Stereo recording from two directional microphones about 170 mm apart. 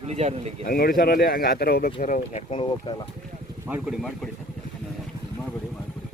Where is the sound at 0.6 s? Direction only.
60° left (ahead or behind).